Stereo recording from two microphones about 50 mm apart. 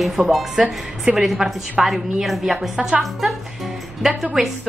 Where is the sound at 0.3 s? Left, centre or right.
Centre.